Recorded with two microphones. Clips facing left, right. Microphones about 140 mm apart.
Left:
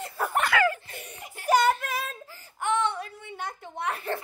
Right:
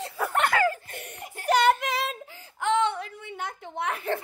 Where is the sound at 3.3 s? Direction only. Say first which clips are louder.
Right 2 dB; 55° right (ahead or behind).